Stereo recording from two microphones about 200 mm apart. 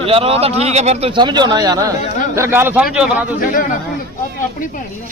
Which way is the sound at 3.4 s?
45° left (ahead or behind).